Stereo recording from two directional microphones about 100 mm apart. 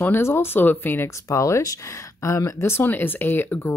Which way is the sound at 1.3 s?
30° left (ahead or behind).